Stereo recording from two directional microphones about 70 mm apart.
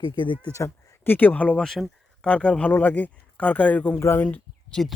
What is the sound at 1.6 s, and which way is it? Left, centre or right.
Speech, centre.